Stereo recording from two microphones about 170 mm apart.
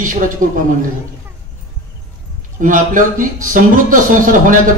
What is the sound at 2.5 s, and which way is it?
A man's voice, 50° right (ahead or behind).